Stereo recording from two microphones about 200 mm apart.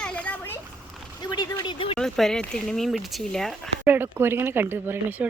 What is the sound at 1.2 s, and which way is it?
Speech, 20° left (ahead or behind).